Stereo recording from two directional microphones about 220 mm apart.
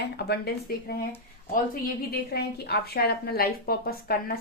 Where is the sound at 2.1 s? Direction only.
45° left (ahead or behind).